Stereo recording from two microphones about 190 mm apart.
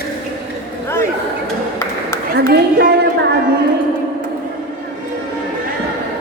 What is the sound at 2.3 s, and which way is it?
A woman's voice, 60° right (ahead or behind).